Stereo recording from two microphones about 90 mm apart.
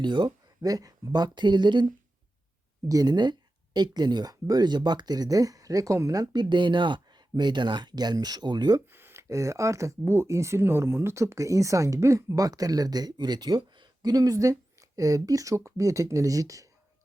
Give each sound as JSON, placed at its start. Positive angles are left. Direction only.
{"t": 0.0, "sound": "speech", "side_deg": -60}
{"t": 0.6, "sound": "speech", "side_deg": -40}
{"t": 2.9, "sound": "speech", "side_deg": -45}
{"t": 6.3, "sound": "speech", "side_deg": -60}
{"t": 8.9, "sound": "speech", "side_deg": -25}